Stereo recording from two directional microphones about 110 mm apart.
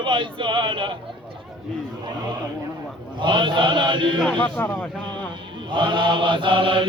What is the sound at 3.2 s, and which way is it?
Speech, 45° right (ahead or behind).